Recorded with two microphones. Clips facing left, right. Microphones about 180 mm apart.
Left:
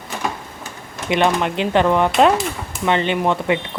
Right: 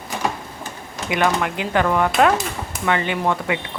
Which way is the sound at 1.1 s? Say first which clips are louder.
Left 3 dB; 25° left (ahead or behind).